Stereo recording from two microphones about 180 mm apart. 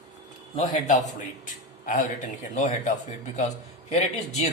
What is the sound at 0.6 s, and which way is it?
A man's voice, 45° left (ahead or behind).